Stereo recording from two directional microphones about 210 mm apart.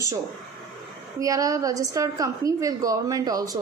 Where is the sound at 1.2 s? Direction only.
15° right (ahead or behind).